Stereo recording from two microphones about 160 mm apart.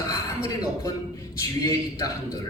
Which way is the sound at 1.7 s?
25° left (ahead or behind).